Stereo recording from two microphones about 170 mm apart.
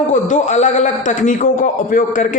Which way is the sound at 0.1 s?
45° left (ahead or behind).